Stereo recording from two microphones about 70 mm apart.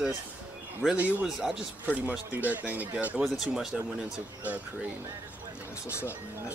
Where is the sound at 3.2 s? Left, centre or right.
Centre.